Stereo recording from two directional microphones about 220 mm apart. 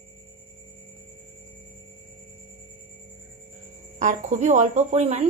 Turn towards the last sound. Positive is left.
turn(degrees=-30)  # may be behind; listen again after turning